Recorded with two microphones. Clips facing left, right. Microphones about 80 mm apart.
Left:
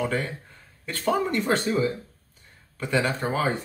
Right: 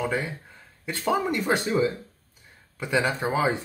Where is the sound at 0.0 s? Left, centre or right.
Centre.